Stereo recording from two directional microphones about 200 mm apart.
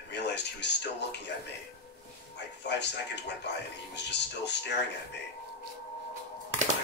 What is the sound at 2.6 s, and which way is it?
A man's voice, 60° left (ahead or behind).